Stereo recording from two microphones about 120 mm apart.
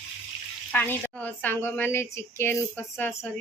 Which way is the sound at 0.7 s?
15° left (ahead or behind).